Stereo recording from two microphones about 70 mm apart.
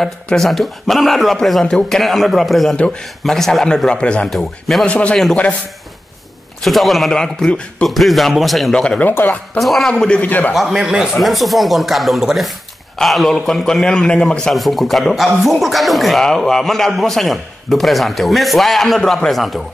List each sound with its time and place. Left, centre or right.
0.0 s a man's voice: centre
2.7 s a man's voice: centre
4.3 s a man's voice: centre
4.8 s a man's voice: centre
6.6 s a man's voice: centre
9.0 s speech: left
9.6 s a man's voice: centre
10.2 s speech: left
10.5 s a man's voice: centre
14.5 s a man's voice: centre